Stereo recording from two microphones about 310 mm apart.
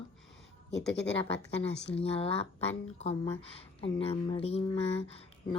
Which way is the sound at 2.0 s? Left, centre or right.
Centre.